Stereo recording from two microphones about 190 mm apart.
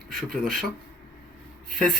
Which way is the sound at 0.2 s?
Centre (ahead or behind).